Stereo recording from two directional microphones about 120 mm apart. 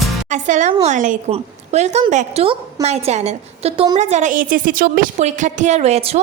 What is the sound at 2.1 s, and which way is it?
Speech, 85° right.